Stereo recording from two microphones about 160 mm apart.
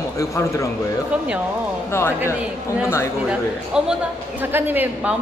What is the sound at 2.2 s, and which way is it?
A man's voice, 10° right (ahead or behind).